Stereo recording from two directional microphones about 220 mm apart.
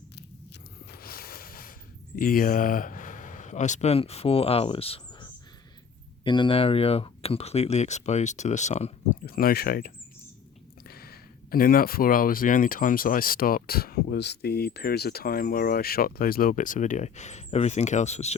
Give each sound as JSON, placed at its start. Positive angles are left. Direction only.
{"t": 0.2, "sound": "a sound", "side_deg": 50}
{"t": 2.1, "sound": "speech", "side_deg": 40}
{"t": 9.2, "sound": "speech", "side_deg": 40}